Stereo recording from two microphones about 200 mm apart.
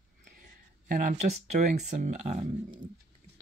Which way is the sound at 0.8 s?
40° right (ahead or behind).